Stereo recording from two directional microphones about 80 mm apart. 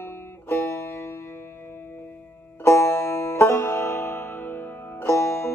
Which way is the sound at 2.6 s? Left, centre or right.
Left.